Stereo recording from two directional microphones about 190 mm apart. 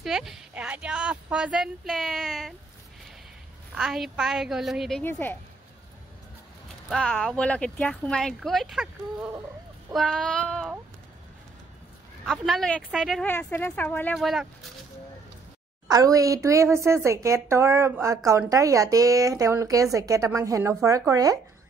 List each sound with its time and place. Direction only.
0.0 s speech: centre (ahead or behind)
3.7 s speech: 5° right (ahead or behind)
5.0 s a woman's voice: 10° left (ahead or behind)
6.9 s speech: 5° left (ahead or behind)
12.3 s speech: centre (ahead or behind)
15.9 s a woman's voice: 15° right (ahead or behind)